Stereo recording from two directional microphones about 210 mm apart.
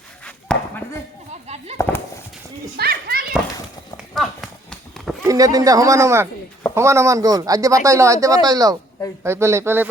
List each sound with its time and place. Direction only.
0.5 s chop: 5° left (ahead or behind)
1.8 s horse: 15° left (ahead or behind)
2.7 s children playing: 45° right (ahead or behind)
3.9 s horse: centre (ahead or behind)
5.3 s a man's voice: 15° right (ahead or behind)